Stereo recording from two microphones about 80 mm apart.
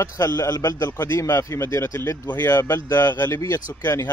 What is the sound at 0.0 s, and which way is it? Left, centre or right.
A man's voice, left.